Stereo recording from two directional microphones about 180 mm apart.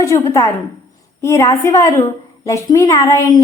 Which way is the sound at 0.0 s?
15° left (ahead or behind).